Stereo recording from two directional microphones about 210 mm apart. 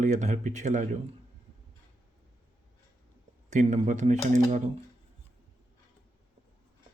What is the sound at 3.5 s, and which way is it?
Speech, 35° right (ahead or behind).